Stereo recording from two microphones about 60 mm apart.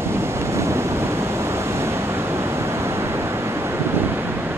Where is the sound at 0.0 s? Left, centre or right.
Right.